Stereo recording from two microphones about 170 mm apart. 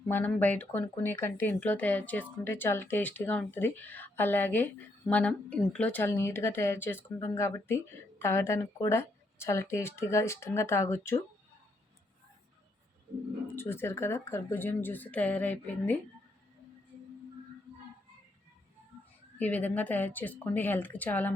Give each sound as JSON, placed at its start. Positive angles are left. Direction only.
{"t": 0.1, "sound": "speech", "side_deg": 10}
{"t": 13.6, "sound": "speech", "side_deg": 15}
{"t": 19.4, "sound": "speech", "side_deg": 10}